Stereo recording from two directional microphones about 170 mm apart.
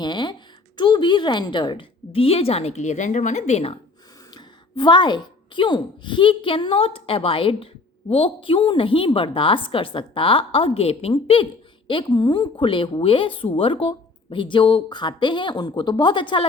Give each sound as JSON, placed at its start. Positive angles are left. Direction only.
{"t": 0.0, "sound": "a woman's voice", "side_deg": 25}
{"t": 4.4, "sound": "a woman's voice", "side_deg": 25}